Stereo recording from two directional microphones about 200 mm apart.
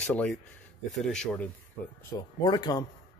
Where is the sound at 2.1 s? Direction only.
20° left (ahead or behind).